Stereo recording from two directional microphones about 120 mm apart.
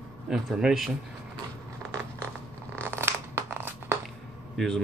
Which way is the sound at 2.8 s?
20° right (ahead or behind).